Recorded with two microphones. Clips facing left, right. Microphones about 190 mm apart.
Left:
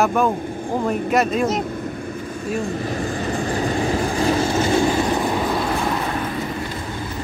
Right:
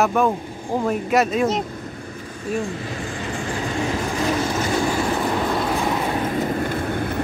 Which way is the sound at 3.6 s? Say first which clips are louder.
Left 2 dB; 30° left (ahead or behind).